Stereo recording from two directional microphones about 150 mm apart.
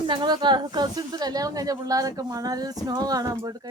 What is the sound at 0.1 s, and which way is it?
Speech, 30° right (ahead or behind).